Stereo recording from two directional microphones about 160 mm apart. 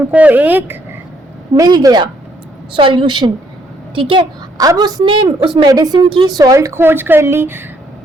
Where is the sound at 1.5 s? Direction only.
25° right (ahead or behind).